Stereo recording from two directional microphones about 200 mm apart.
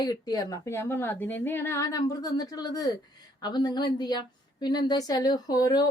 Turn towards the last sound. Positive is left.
turn(degrees=15)  # may be behind; listen again after turning